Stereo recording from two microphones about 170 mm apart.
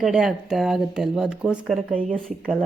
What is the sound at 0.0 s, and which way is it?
A woman's voice, 5° right (ahead or behind).